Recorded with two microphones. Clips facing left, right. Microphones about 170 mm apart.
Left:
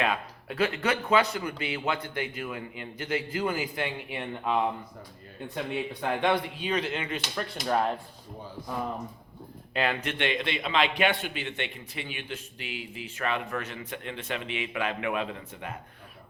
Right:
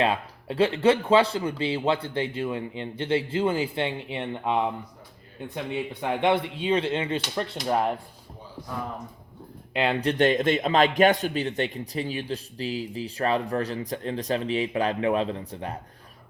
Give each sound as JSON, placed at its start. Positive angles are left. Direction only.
{"t": 0.0, "sound": "speech", "side_deg": -30}
{"t": 5.9, "sound": "speech", "side_deg": -20}
{"t": 7.7, "sound": "speech", "side_deg": -10}
{"t": 9.7, "sound": "a man's voice", "side_deg": -25}